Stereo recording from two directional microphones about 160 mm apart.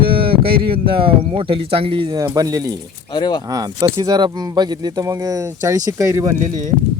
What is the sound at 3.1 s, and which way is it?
Speech, 30° left (ahead or behind).